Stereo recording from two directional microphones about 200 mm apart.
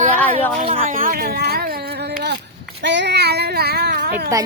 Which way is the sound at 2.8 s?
60° right (ahead or behind).